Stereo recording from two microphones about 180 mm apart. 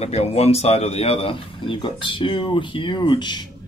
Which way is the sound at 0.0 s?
35° left (ahead or behind).